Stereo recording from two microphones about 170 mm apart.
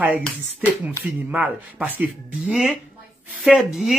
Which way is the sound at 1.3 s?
10° right (ahead or behind).